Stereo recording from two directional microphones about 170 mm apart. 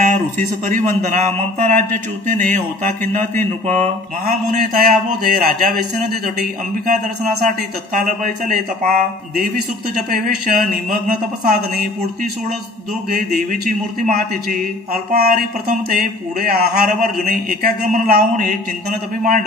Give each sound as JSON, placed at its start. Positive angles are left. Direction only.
{"t": 0.0, "sound": "a man's voice", "side_deg": -50}
{"t": 7.4, "sound": "a man's voice", "side_deg": -50}